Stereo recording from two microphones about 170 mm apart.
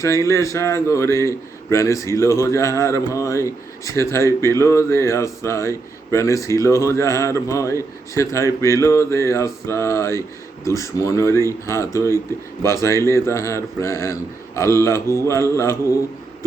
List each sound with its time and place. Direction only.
0.0 s speech: 20° left (ahead or behind)